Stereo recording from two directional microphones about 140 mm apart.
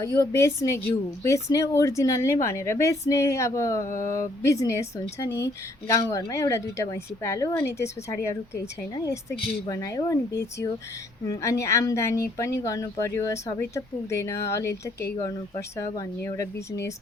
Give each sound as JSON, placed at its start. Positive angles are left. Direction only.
{"t": 0.0, "sound": "a woman's voice", "side_deg": 20}
{"t": 9.6, "sound": "a woman's voice", "side_deg": 25}